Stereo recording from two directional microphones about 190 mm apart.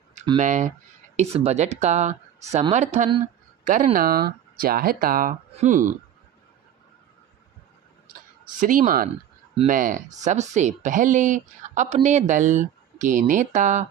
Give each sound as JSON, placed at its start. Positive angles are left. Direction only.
{"t": 0.3, "sound": "speech", "side_deg": -40}
{"t": 8.6, "sound": "speech", "side_deg": -45}